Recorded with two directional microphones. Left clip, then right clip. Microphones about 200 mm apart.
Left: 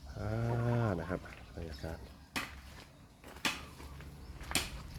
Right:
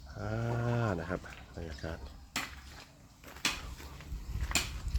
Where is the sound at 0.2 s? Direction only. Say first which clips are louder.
Right 1 dB; 5° right (ahead or behind).